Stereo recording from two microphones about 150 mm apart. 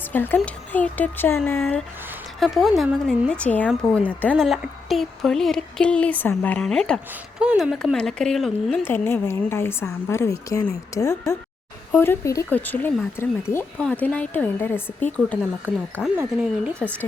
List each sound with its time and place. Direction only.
0.1 s a child's voice: 15° left (ahead or behind); by 3.2 s 5° right (ahead or behind)
3.2 s a woman's voice: 10° left (ahead or behind)
8.8 s a woman's voice: 15° left (ahead or behind)
16.0 s speech: 5° right (ahead or behind)